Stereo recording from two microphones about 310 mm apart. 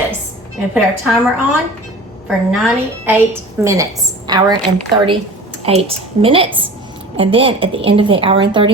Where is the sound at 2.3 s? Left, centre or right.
Centre.